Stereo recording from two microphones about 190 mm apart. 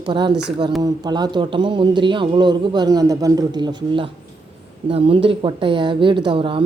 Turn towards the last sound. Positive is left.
turn(degrees=-25)  # may be behind; listen again after turning